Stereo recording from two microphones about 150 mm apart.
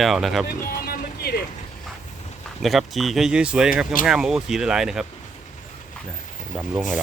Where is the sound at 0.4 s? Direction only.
90° left.